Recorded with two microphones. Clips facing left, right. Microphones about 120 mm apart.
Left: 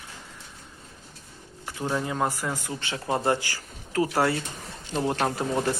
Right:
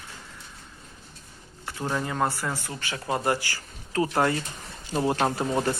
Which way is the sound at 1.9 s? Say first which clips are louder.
Even; 10° left (ahead or behind).